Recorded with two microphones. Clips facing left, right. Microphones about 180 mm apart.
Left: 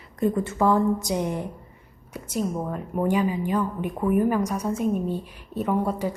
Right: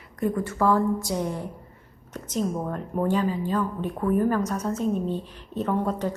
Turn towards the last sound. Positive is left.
turn(degrees=10)  # may be behind; listen again after turning